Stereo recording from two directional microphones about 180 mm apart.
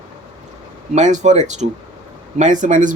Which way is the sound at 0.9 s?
40° right (ahead or behind).